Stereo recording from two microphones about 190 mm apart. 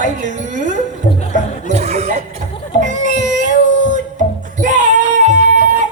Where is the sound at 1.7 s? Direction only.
35° right (ahead or behind).